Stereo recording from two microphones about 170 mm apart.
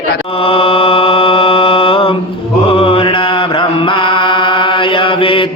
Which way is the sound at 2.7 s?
35° left (ahead or behind).